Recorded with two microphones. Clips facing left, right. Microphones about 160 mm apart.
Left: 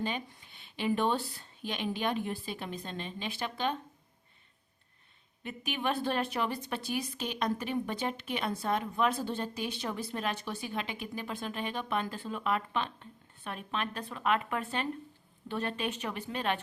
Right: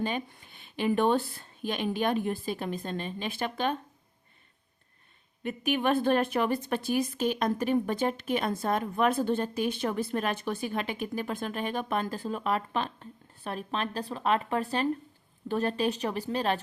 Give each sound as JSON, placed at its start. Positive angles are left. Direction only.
{"t": 0.0, "sound": "speech", "side_deg": -50}
{"t": 5.4, "sound": "speech", "side_deg": -50}